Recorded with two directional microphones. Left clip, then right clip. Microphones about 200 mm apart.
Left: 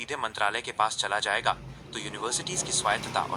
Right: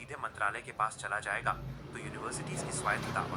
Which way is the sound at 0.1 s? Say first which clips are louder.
Left 6 dB; 40° left (ahead or behind).